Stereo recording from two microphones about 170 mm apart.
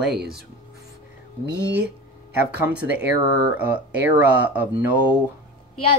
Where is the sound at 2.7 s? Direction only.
10° right (ahead or behind).